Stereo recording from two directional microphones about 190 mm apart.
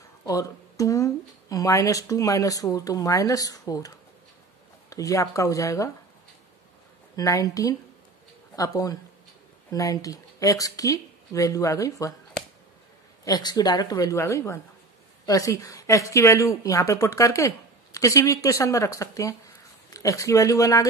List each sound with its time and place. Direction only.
0.2 s a woman's voice: 15° left (ahead or behind)
7.2 s a woman's voice: 20° left (ahead or behind)
13.2 s a woman's voice: 20° left (ahead or behind)